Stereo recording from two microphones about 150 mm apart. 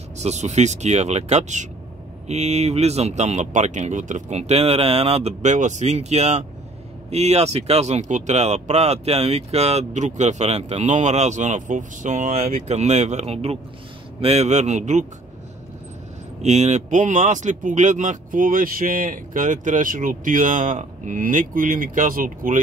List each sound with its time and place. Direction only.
0.2 s speech: 50° right (ahead or behind)
16.3 s speech: 50° right (ahead or behind); by 22.6 s 65° right (ahead or behind)